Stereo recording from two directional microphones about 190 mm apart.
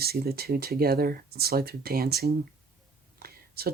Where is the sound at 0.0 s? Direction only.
55° right (ahead or behind).